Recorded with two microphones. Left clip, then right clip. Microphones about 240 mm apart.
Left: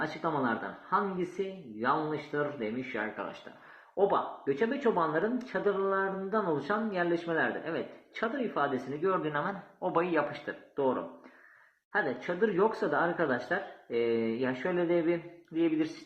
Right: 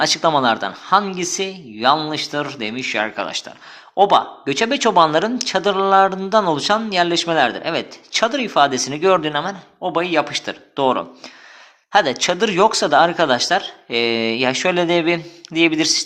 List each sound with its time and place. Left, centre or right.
0.0 s speech: right